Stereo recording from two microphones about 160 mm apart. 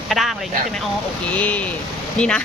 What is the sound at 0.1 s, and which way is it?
Speech, centre (ahead or behind).